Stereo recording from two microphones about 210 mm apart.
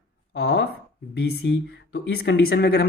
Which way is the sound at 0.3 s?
50° left (ahead or behind).